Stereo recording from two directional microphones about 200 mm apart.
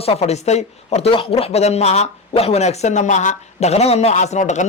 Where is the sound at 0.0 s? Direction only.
30° left (ahead or behind).